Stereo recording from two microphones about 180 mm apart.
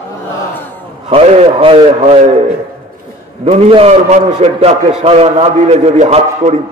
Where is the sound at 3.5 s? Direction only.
35° right (ahead or behind).